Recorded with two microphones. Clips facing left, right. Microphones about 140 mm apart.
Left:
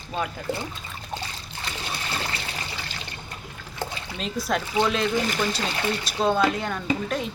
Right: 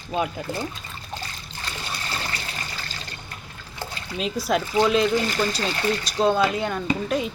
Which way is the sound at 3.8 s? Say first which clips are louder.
Left 2 dB; 20° left (ahead or behind).